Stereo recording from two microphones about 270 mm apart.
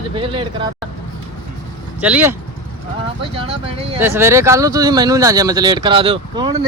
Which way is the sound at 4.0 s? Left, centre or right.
Centre.